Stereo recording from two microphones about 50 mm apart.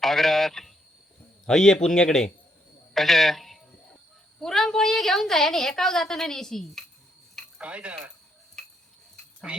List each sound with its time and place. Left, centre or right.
0.0 s a woman's voice: centre
7.6 s speech: right
8.6 s tick-tock: centre
9.5 s frog: centre